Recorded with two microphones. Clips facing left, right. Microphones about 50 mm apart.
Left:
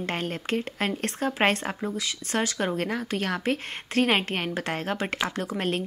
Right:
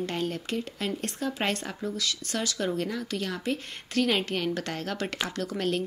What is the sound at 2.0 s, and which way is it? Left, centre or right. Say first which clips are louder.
Speech: left 1 dB; left.